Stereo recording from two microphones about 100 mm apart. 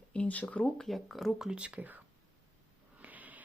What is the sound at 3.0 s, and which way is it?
Snort, 15° right (ahead or behind).